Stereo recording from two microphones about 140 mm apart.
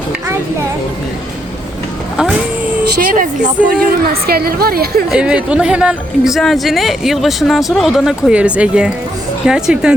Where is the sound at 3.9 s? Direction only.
90° right.